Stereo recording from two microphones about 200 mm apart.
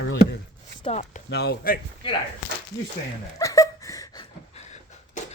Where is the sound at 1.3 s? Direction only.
55° left (ahead or behind).